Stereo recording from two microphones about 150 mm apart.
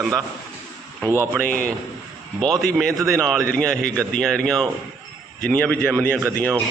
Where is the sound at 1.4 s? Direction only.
10° left (ahead or behind).